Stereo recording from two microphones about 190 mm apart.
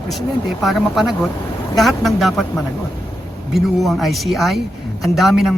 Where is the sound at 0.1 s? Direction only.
Centre (ahead or behind).